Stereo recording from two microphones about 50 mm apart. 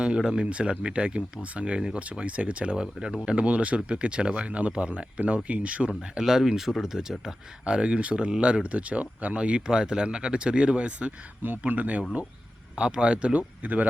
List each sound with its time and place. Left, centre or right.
0.0 s speech: centre
5.9 s speech: centre
7.6 s speech: right
13.6 s speech: right